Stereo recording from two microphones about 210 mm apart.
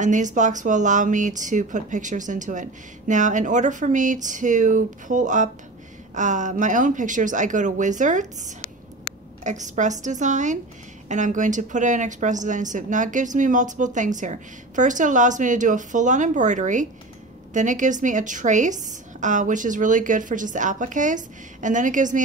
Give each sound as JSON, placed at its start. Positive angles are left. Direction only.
{"t": 0.0, "sound": "a woman's voice", "side_deg": -35}